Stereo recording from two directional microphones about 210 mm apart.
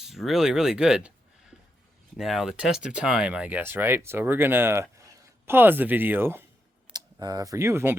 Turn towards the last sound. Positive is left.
turn(degrees=-10)  # may be behind; listen again after turning